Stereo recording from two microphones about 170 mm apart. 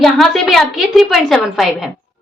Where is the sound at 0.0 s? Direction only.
Centre (ahead or behind).